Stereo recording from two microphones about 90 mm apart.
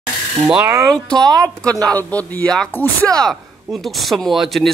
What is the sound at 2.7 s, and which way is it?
Speech, 20° left (ahead or behind).